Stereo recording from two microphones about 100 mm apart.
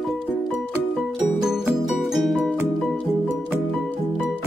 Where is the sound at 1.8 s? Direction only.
Centre (ahead or behind).